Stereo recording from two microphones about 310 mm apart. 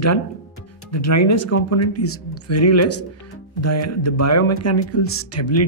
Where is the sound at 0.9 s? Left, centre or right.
Left.